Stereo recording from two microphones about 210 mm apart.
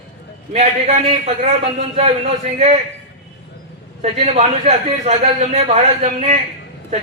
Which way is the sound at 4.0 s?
30° right (ahead or behind).